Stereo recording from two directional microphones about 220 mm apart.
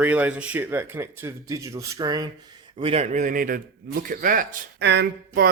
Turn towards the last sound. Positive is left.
turn(degrees=-45)  # may be behind; listen again after turning